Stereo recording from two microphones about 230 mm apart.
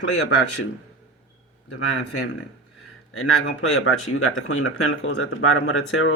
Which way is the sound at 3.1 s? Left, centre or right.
Left.